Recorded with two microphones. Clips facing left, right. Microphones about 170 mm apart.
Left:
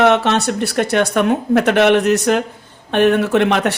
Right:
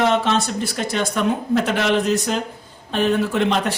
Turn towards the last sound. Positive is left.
turn(degrees=65)  # may be behind; listen again after turning